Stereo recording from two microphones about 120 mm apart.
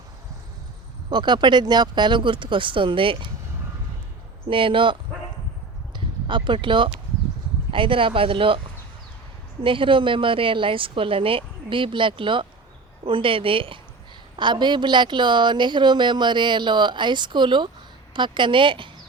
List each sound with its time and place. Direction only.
1.1 s a woman's voice: 40° right (ahead or behind)
4.4 s a woman's voice: 45° right (ahead or behind)
6.2 s a woman's voice: 40° right (ahead or behind)
9.6 s a woman's voice: 45° right (ahead or behind)